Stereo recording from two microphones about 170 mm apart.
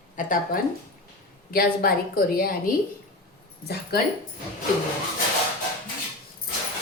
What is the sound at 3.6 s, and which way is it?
Speech, 70° left (ahead or behind).